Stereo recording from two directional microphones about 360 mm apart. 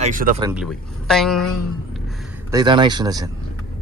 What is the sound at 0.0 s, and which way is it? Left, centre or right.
Speech, right.